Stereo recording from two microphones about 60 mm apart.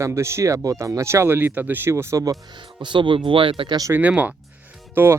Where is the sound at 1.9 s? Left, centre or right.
Right.